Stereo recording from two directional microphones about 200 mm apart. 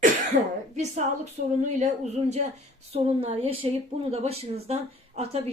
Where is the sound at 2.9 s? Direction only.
30° right (ahead or behind).